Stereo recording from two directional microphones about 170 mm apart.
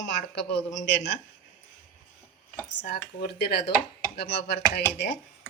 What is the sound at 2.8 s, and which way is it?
Speech, 75° left (ahead or behind).